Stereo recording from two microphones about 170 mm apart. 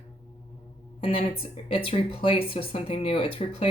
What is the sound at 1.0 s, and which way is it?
Speech, 35° left (ahead or behind).